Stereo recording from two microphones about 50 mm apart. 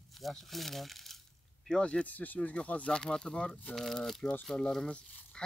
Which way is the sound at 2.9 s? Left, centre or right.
Centre.